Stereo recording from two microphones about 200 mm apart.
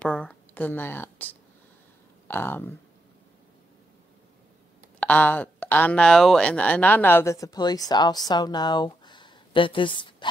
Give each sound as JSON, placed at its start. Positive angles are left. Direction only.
{"t": 0.0, "sound": "a sound", "side_deg": 5}
{"t": 2.2, "sound": "speech", "side_deg": 10}
{"t": 5.0, "sound": "speech", "side_deg": 10}